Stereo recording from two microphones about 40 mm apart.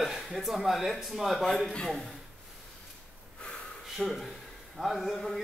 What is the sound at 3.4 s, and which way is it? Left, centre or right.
Gasp, left.